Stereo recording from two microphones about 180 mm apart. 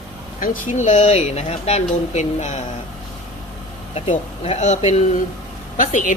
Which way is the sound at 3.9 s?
35° left (ahead or behind).